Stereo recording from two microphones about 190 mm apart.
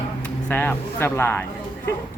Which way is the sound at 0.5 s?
10° left (ahead or behind).